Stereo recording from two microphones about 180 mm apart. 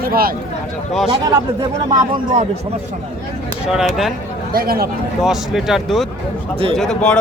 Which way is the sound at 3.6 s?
5° right (ahead or behind).